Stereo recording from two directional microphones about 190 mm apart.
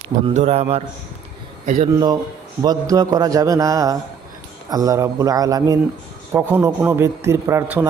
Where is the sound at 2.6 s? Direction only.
20° right (ahead or behind).